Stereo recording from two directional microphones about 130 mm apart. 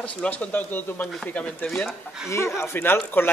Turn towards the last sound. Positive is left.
turn(degrees=15)  # may be behind; listen again after turning